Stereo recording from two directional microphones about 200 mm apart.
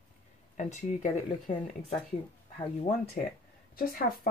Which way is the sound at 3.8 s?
45° left (ahead or behind).